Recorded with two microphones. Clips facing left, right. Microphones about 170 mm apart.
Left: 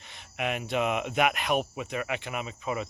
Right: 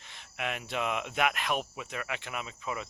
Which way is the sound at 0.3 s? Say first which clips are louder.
Left 5 dB; 15° left (ahead or behind).